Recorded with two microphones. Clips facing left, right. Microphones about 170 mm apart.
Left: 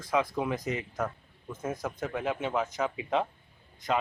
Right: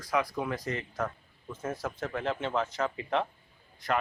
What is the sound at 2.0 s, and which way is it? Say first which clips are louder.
Speech: left 1 dB; 10° left (ahead or behind).